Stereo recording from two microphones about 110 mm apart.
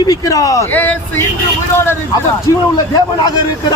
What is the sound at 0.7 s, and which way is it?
Speech, 15° left (ahead or behind).